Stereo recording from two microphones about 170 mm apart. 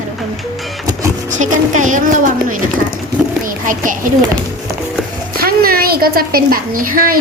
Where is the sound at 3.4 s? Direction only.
50° right (ahead or behind).